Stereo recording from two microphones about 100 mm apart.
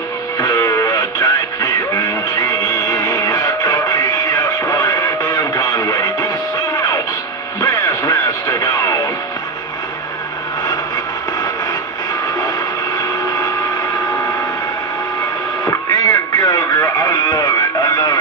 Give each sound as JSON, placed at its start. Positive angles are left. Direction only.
{"t": 0.7, "sound": "music", "side_deg": 35}
{"t": 7.6, "sound": "music", "side_deg": 45}
{"t": 12.9, "sound": "vehicle", "side_deg": 45}
{"t": 15.6, "sound": "radio", "side_deg": 40}